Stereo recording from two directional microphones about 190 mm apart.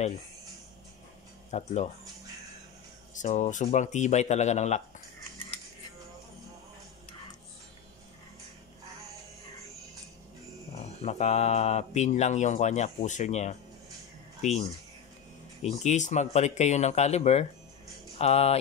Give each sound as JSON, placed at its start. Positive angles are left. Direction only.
{"t": 1.5, "sound": "speech", "side_deg": 40}
{"t": 3.2, "sound": "speech", "side_deg": 40}
{"t": 11.0, "sound": "speech", "side_deg": 35}
{"t": 15.6, "sound": "speech", "side_deg": 35}
{"t": 18.1, "sound": "music", "side_deg": 35}